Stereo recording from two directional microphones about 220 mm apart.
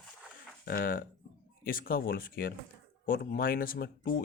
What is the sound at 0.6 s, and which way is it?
Speech, 40° left (ahead or behind).